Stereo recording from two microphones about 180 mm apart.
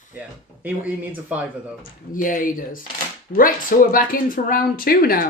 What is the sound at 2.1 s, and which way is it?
Speech, 50° left (ahead or behind).